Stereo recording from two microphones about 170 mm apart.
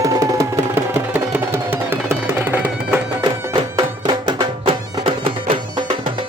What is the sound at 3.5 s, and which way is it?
Music, 25° right (ahead or behind).